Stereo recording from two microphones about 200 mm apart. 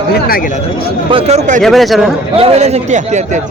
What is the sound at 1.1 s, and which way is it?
Speech, 30° right (ahead or behind).